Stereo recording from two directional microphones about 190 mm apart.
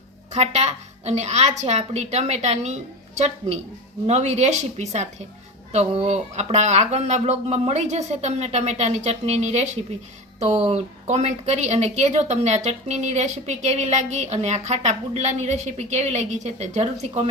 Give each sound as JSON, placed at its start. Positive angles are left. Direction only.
{"t": 0.3, "sound": "speech", "side_deg": -35}